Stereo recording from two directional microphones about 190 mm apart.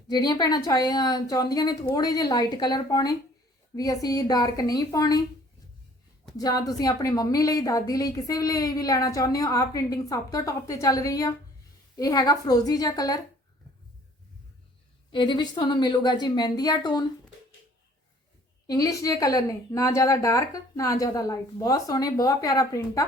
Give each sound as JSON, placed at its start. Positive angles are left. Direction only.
{"t": 0.1, "sound": "a woman's voice", "side_deg": 20}
{"t": 6.3, "sound": "a woman's voice", "side_deg": 20}
{"t": 15.1, "sound": "a woman's voice", "side_deg": 25}
{"t": 18.7, "sound": "a woman's voice", "side_deg": 20}